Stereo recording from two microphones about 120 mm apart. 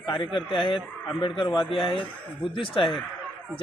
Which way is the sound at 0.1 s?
45° left (ahead or behind).